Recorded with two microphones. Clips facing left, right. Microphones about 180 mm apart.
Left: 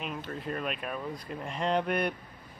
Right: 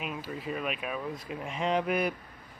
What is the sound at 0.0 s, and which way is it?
Speech, 5° right (ahead or behind).